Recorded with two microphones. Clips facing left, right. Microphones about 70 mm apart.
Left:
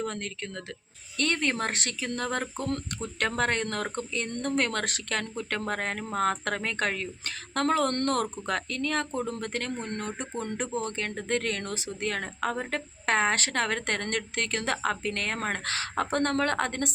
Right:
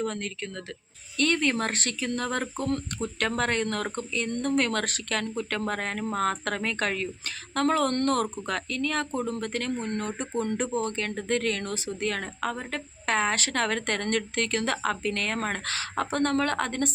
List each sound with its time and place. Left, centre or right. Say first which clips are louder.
0.0 s speech: right 2 dB; left
2.6 s speech: right 3 dB; right
3.2 s speech: even; left
9.8 s speech: right 3 dB; right
10.4 s speech: right 3 dB; centre